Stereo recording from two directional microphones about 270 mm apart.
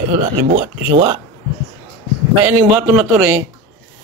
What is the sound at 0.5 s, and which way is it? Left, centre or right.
Speech, right.